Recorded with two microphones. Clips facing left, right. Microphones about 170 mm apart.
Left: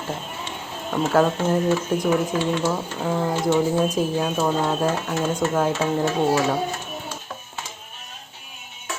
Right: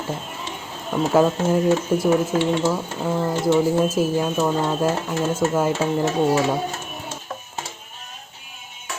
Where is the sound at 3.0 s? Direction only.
Centre (ahead or behind).